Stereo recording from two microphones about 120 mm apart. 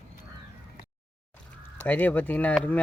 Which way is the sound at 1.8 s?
15° left (ahead or behind).